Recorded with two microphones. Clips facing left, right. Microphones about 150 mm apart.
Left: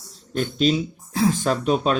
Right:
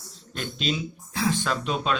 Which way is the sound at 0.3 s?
40° left (ahead or behind).